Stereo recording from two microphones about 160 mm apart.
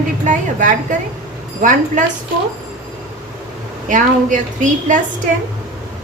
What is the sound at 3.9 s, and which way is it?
A woman's voice, 50° right (ahead or behind).